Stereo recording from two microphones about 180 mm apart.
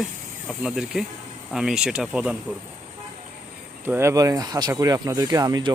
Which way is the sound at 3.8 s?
15° right (ahead or behind).